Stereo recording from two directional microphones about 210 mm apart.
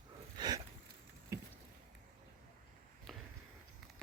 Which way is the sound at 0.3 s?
20° right (ahead or behind).